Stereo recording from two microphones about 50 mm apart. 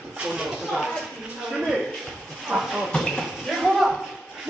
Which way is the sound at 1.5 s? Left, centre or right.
Centre.